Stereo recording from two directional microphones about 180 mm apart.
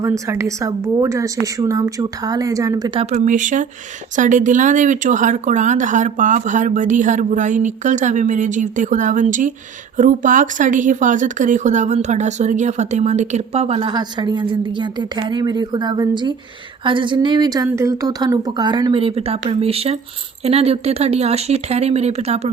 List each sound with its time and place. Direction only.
0.0 s speech: 15° right (ahead or behind); by 22.4 s 35° right (ahead or behind)